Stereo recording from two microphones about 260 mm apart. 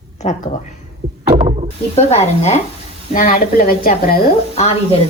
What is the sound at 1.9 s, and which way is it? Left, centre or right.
A woman's voice, left.